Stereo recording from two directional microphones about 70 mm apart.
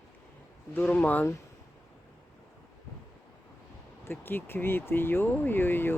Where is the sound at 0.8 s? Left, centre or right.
Left.